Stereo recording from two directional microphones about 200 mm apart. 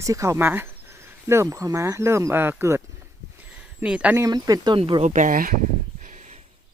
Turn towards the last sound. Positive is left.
turn(degrees=-40)  # may be behind; listen again after turning